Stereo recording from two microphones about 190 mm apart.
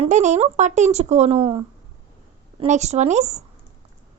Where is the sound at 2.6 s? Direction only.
35° right (ahead or behind).